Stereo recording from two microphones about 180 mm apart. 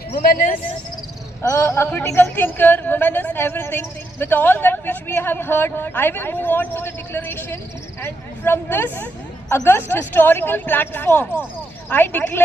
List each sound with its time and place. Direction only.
0.1 s a man's voice: 55° left (ahead or behind)
1.4 s a man's voice: 15° left (ahead or behind)